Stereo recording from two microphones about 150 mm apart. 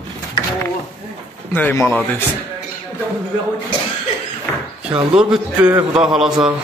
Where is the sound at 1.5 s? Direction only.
10° left (ahead or behind).